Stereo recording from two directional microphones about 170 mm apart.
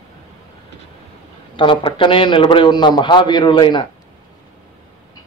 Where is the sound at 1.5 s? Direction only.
30° left (ahead or behind).